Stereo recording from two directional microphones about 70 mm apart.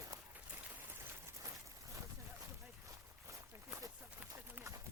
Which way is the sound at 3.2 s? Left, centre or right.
Right.